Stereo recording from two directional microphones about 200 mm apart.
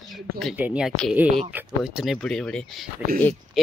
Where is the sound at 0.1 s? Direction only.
Centre (ahead or behind).